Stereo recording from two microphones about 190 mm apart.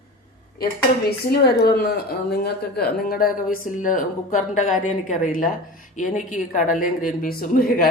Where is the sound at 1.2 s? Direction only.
55° left (ahead or behind).